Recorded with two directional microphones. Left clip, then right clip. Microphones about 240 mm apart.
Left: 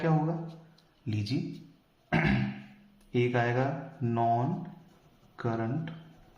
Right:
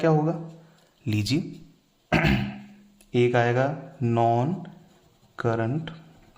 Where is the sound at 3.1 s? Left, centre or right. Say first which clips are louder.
Right 7 dB; right.